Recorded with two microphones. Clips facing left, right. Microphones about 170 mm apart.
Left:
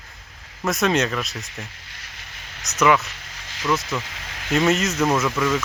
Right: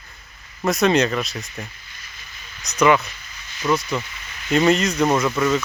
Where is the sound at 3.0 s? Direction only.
90° left.